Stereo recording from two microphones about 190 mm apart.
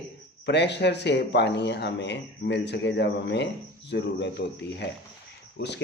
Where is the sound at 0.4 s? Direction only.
65° left (ahead or behind).